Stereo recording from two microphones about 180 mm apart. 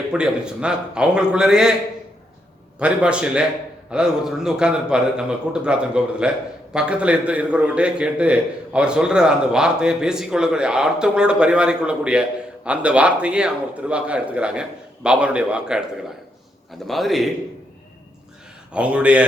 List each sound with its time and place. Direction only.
0.1 s a man's voice: 5° right (ahead or behind)
2.7 s a man's voice: 5° right (ahead or behind)
18.7 s speech: 5° right (ahead or behind)